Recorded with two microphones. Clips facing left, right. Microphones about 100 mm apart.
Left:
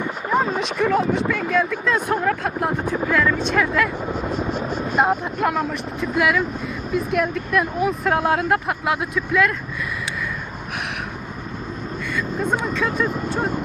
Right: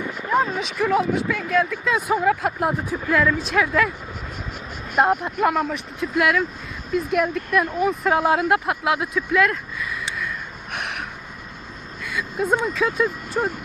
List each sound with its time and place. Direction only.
0.6 s speech: centre (ahead or behind)
4.1 s speech: 30° left (ahead or behind)
4.9 s speech: centre (ahead or behind)
12.1 s speech: 5° right (ahead or behind)